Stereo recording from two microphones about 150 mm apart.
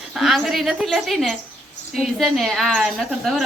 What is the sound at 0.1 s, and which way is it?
A woman's voice, centre (ahead or behind).